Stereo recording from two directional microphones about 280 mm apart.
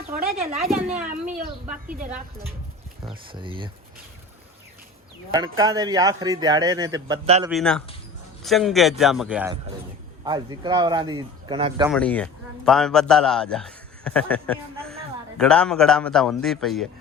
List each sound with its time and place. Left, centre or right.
0.2 s a woman's voice: right
3.0 s a man's voice: centre
5.3 s a man's voice: centre
7.5 s a man's voice: centre
10.2 s a man's voice: centre
11.9 s a man's voice: centre